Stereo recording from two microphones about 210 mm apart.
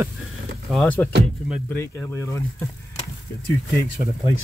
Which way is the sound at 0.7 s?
5° left (ahead or behind).